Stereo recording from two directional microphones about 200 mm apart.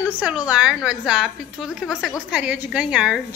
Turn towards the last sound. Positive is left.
turn(degrees=-5)  # may be behind; listen again after turning